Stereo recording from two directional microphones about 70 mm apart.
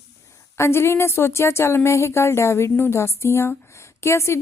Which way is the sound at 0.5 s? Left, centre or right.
Left.